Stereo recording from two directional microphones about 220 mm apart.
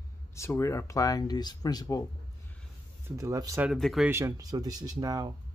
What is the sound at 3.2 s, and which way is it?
Speech, 15° right (ahead or behind).